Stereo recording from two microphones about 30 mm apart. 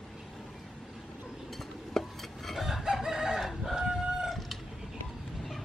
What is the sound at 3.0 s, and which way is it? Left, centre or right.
Chicken, centre.